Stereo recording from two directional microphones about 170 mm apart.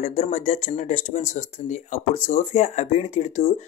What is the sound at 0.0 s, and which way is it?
Speech, 45° left (ahead or behind).